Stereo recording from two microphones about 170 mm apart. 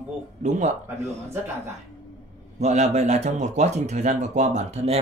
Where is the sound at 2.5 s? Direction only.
40° right (ahead or behind).